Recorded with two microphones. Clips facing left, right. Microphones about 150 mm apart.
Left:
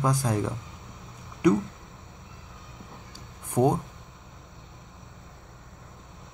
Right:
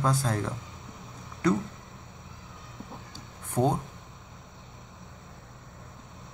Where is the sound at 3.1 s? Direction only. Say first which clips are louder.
Left 4 dB; 15° left (ahead or behind).